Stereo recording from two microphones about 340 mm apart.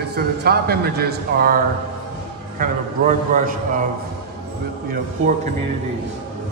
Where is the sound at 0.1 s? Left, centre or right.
Right.